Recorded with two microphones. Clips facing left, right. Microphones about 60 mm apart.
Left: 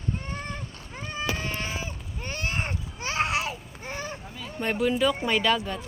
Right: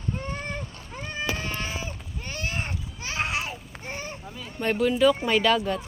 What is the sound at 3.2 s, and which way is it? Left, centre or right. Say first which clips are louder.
Babbling: left 1 dB; left.